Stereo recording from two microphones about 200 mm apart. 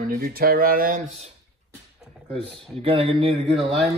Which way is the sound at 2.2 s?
30° right (ahead or behind).